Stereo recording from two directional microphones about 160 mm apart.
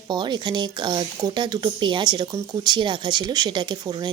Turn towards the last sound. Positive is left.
turn(degrees=-30)  # may be behind; listen again after turning